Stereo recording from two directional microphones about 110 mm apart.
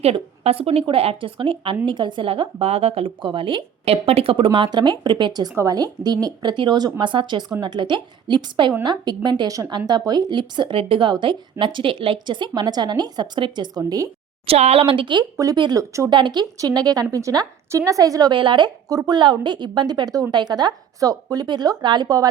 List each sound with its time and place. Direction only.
0.0 s a woman's voice: 65° right (ahead or behind); by 14.1 s 35° right (ahead or behind)
14.4 s a woman's voice: 65° right (ahead or behind); by 16.0 s 30° right (ahead or behind)
16.0 s a woman's voice: 45° right (ahead or behind)